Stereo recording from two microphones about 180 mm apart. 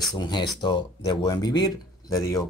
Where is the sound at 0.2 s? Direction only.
25° left (ahead or behind).